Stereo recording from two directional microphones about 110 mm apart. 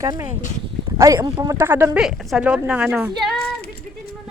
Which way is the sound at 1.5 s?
20° right (ahead or behind).